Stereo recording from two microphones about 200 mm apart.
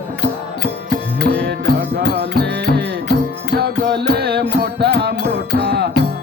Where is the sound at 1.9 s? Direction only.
55° right (ahead or behind).